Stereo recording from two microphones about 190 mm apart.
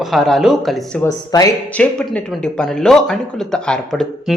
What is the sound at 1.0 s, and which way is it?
Speech, 20° left (ahead or behind).